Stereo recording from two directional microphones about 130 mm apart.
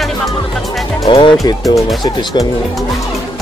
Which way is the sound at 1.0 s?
40° left (ahead or behind).